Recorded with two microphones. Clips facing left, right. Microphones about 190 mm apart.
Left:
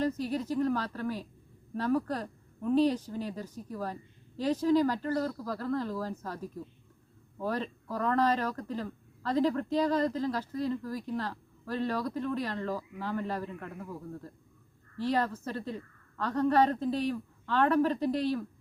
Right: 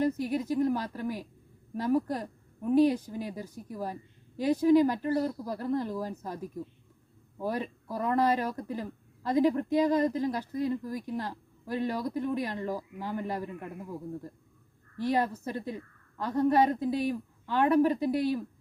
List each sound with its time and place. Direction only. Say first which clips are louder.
0.2 s speech: right 2 dB; 15° right (ahead or behind)